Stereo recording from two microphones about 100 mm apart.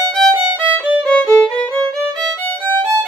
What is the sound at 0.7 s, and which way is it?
Music, 15° left (ahead or behind).